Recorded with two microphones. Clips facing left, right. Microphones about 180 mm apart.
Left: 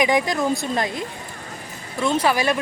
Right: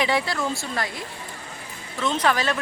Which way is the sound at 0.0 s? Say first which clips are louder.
Left 4 dB; 15° left (ahead or behind).